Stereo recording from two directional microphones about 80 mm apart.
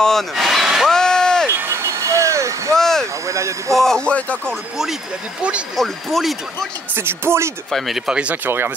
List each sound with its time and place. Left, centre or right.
0.0 s speech: centre
0.9 s a sound: centre
1.7 s vehicle: right
2.7 s a sound: centre
3.3 s speech: right
3.7 s speech: centre
5.8 s speech: centre
7.0 s speech: right
7.7 s speech: centre
8.1 s speech: centre
8.5 s speech: right